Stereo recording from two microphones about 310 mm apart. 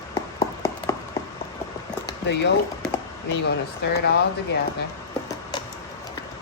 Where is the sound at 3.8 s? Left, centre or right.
Left.